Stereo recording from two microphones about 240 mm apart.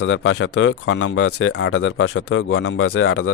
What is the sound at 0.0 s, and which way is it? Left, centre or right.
Speech, left.